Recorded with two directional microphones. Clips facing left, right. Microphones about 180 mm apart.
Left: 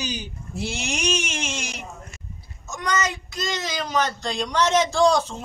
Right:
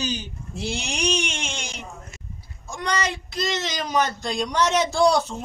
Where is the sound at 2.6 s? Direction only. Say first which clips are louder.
Left 1 dB; 30° right (ahead or behind).